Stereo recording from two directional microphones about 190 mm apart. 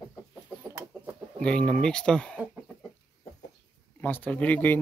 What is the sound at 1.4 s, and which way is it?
Speech, 5° left (ahead or behind).